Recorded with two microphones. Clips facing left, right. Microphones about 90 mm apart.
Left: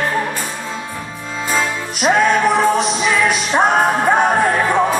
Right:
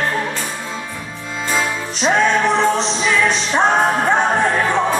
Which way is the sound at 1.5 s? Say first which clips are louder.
Left 1 dB; 5° left (ahead or behind).